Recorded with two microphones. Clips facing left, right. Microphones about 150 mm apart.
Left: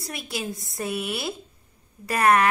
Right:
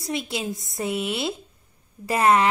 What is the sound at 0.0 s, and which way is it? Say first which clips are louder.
A woman's voice: right 4 dB; 25° right (ahead or behind).